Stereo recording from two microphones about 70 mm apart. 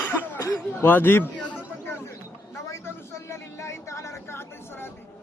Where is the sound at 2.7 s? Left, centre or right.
Left.